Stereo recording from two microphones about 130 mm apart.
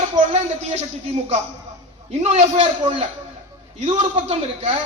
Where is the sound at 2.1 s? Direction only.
55° right (ahead or behind).